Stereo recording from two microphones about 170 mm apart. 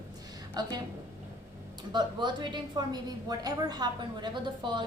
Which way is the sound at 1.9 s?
25° right (ahead or behind).